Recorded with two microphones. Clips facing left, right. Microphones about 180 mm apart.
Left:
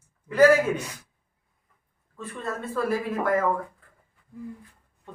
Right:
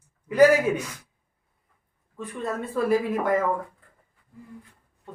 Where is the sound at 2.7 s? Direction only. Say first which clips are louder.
Right 4 dB; 15° right (ahead or behind).